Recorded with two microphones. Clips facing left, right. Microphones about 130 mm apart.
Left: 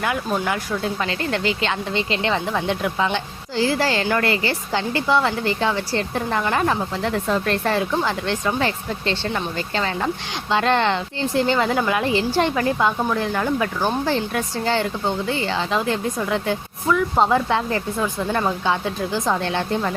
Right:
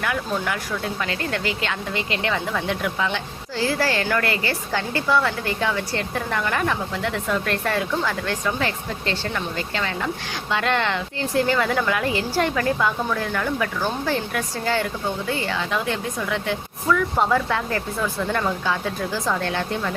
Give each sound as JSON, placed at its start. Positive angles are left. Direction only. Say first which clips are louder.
{"t": 0.0, "sound": "speech", "louder": "left 2 dB", "side_deg": 25}
{"t": 16.9, "sound": "speech", "louder": "left 2 dB", "side_deg": 20}